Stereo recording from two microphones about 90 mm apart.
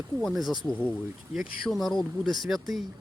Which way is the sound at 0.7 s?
20° left (ahead or behind).